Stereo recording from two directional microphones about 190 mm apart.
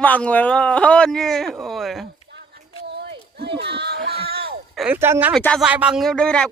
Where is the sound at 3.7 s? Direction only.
60° right (ahead or behind).